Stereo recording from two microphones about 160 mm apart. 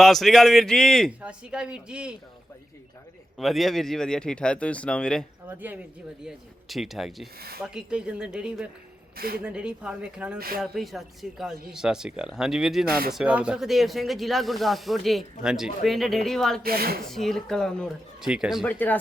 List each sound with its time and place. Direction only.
0.0 s speech: centre (ahead or behind)
3.3 s speech: centre (ahead or behind)
5.5 s speech: 10° right (ahead or behind)
6.2 s speech: centre (ahead or behind)
7.3 s a woman's voice: 75° right (ahead or behind)
7.6 s speech: 5° right (ahead or behind)
9.1 s a woman's voice: 70° right (ahead or behind)
9.4 s speech: 5° right (ahead or behind)
10.3 s a woman's voice: 65° right (ahead or behind)
10.6 s speech: centre (ahead or behind)
16.6 s a woman's voice: 70° right (ahead or behind)
17.0 s speech: centre (ahead or behind)
18.6 s speech: 10° left (ahead or behind)